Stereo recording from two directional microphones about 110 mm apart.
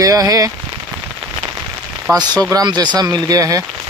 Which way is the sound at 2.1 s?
25° right (ahead or behind).